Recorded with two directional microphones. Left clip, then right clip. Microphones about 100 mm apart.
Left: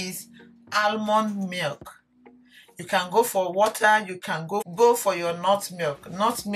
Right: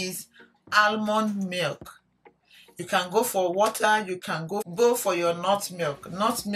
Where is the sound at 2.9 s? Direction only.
20° right (ahead or behind).